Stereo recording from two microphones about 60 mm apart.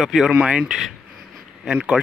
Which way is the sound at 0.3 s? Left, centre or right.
Centre.